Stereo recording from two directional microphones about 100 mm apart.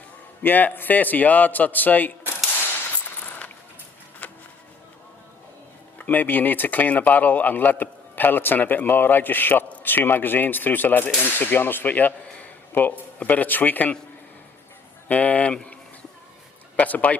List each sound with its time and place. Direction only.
0.4 s a man's voice: 20° left (ahead or behind)
3.2 s mechanisms: 15° left (ahead or behind)
4.2 s music: 15° left (ahead or behind)
6.0 s a man's voice: 15° left (ahead or behind)
15.0 s speech: 15° left (ahead or behind)